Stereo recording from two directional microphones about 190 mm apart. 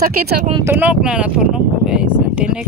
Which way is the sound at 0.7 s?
10° right (ahead or behind).